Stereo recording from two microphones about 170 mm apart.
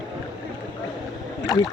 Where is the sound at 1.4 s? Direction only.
20° left (ahead or behind).